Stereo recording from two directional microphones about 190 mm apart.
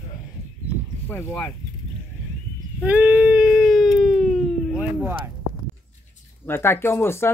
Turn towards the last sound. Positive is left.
turn(degrees=15)  # may be behind; listen again after turning